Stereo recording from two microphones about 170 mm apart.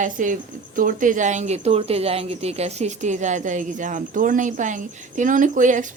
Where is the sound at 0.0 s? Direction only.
50° right (ahead or behind).